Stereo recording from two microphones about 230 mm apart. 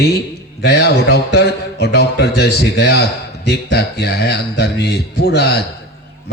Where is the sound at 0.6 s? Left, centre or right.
Left.